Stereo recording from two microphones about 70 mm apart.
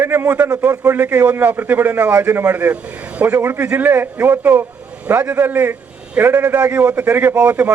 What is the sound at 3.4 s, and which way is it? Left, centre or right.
Speech, right.